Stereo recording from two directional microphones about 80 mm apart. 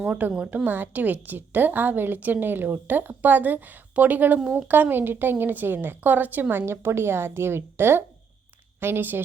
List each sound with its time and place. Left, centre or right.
0.0 s a woman's voice: centre
4.7 s a woman's voice: right